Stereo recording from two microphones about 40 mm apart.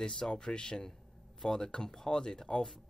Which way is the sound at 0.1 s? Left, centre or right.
Left.